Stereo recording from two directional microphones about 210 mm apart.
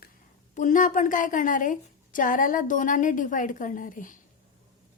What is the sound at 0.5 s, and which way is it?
A woman's voice, 40° left (ahead or behind).